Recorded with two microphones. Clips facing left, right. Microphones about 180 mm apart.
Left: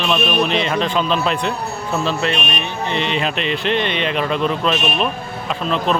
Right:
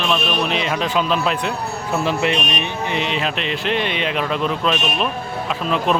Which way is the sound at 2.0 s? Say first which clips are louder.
Right 2 dB; 15° right (ahead or behind).